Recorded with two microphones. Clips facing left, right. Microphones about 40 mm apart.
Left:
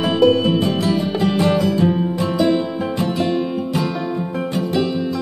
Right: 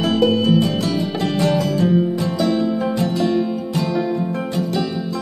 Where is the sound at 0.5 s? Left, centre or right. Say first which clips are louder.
Even; left.